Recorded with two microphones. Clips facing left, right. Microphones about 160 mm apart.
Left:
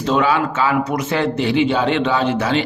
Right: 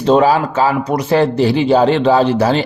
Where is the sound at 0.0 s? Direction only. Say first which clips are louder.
Right 6 dB; 35° right (ahead or behind).